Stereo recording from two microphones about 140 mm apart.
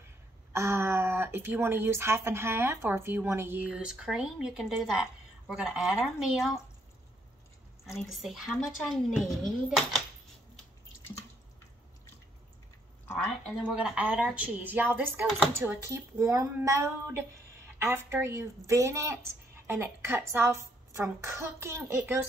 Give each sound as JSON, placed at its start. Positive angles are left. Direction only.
{"t": 0.5, "sound": "speech", "side_deg": -20}
{"t": 8.1, "sound": "speech", "side_deg": 0}
{"t": 13.7, "sound": "a woman's voice", "side_deg": -10}